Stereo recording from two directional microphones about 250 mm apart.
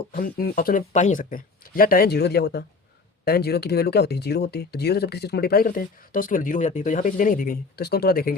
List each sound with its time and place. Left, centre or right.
0.1 s speech: left